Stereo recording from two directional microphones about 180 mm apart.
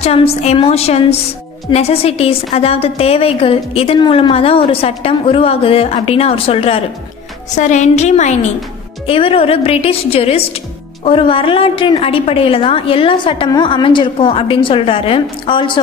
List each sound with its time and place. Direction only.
0.0 s a woman's voice: 35° left (ahead or behind)
7.5 s a woman's voice: 40° left (ahead or behind)